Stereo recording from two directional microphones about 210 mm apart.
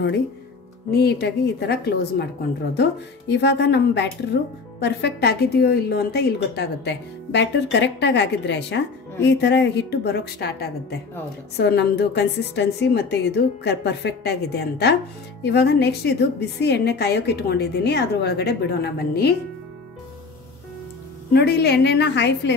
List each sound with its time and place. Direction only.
0.9 s a woman's voice: 50° left (ahead or behind)
21.3 s a woman's voice: 50° left (ahead or behind)